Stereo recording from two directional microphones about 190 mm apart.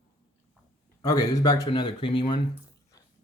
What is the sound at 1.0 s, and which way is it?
Speech, 15° left (ahead or behind).